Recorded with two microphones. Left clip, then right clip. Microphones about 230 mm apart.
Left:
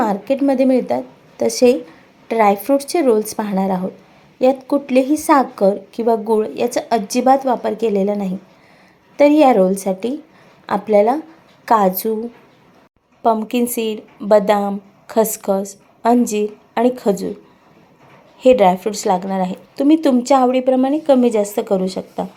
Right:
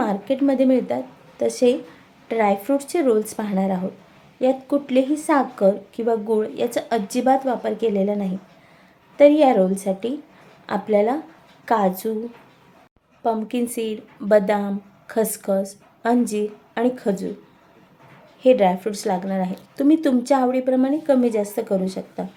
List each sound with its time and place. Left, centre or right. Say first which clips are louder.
0.0 s speech: left 4 dB; centre
13.2 s speech: left 7 dB; centre
18.3 s speech: left 5 dB; centre